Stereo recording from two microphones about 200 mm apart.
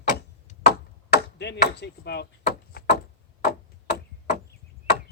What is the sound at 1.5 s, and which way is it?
Speech, 55° left (ahead or behind).